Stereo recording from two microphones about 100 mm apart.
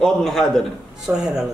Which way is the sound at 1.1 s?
15° right (ahead or behind).